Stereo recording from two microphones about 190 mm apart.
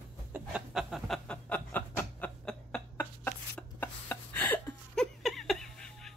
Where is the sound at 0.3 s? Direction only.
5° right (ahead or behind).